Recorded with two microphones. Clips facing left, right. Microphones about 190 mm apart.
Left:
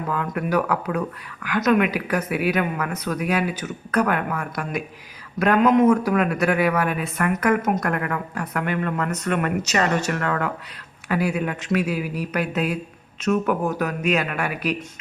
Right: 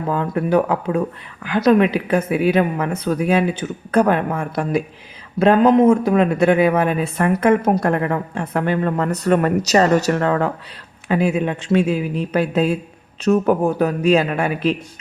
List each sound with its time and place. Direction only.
0.1 s speech: 30° right (ahead or behind)